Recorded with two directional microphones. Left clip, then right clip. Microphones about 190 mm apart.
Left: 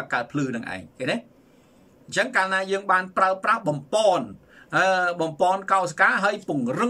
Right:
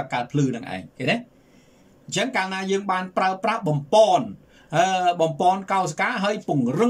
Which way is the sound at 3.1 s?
15° right (ahead or behind).